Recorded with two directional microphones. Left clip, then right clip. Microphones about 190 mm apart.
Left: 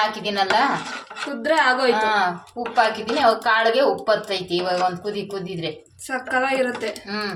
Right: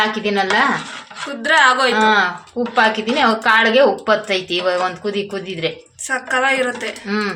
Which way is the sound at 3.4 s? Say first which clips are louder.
Right 5 dB; 30° right (ahead or behind).